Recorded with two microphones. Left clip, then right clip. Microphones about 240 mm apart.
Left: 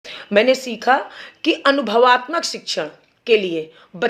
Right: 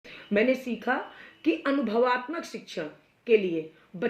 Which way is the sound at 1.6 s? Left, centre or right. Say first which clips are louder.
Left 13 dB; centre.